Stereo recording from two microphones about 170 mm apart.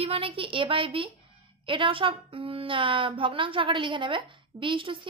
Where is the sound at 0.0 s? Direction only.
30° right (ahead or behind).